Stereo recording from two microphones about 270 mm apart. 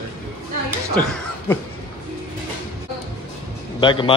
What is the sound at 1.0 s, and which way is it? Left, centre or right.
Speech, centre.